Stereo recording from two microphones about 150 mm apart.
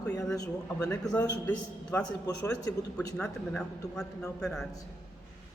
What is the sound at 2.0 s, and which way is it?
A man's voice, 25° left (ahead or behind).